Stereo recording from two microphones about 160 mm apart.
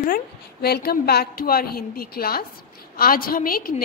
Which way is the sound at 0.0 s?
70° left (ahead or behind).